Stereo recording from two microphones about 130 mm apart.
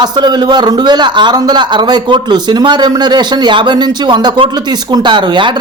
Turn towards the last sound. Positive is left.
turn(degrees=-40)  # may be behind; listen again after turning